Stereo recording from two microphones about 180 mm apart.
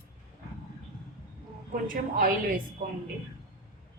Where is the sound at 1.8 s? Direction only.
50° right (ahead or behind).